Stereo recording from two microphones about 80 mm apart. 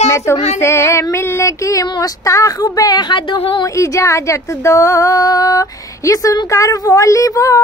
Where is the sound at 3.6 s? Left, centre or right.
Left.